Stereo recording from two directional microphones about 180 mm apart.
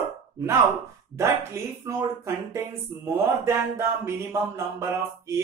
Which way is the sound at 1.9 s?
15° right (ahead or behind).